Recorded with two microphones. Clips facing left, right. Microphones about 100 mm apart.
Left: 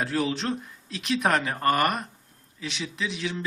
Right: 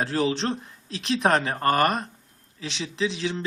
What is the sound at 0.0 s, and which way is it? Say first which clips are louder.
Speech: right 2 dB; 30° right (ahead or behind).